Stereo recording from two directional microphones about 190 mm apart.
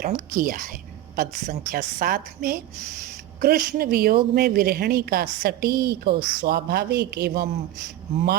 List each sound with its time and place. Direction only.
0.0 s a woman's voice: 50° right (ahead or behind)
6.1 s speech: 25° right (ahead or behind)
6.4 s speech: 55° right (ahead or behind)